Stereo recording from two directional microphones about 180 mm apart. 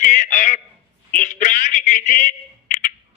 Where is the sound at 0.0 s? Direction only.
45° left (ahead or behind).